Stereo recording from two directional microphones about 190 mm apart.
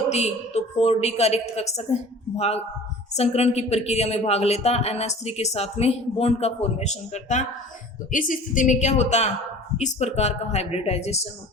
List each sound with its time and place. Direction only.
0.1 s speech: 35° left (ahead or behind)